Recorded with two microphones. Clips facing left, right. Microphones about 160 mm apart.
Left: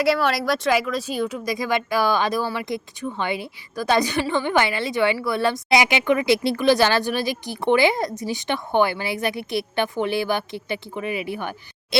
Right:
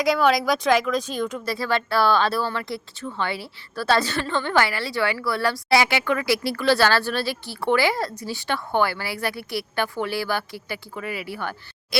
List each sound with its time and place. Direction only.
0.0 s speech: centre (ahead or behind); by 11.9 s 20° left (ahead or behind)